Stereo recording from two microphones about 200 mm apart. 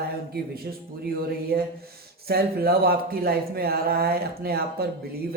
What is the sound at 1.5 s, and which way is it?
Speech, 50° right (ahead or behind).